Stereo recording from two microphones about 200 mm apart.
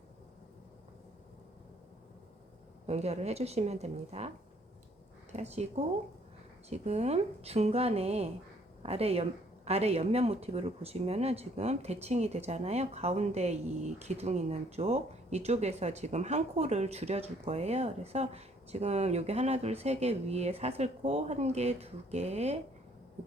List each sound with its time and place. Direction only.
2.8 s speech: 30° right (ahead or behind)
5.4 s speech: 35° right (ahead or behind)
6.7 s speech: 35° right (ahead or behind)